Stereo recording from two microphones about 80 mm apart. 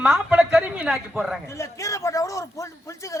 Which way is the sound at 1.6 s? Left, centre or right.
Left.